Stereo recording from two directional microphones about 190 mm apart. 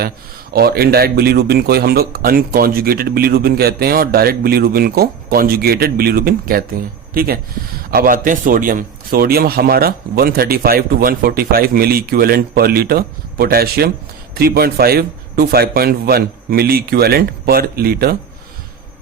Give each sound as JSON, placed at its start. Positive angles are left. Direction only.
{"t": 0.5, "sound": "speech", "side_deg": -55}